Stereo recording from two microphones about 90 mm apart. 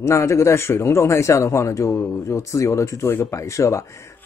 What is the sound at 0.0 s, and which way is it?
A man's voice, 30° left (ahead or behind).